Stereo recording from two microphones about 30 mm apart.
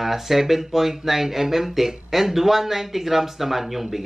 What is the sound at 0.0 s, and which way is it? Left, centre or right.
Speech, centre.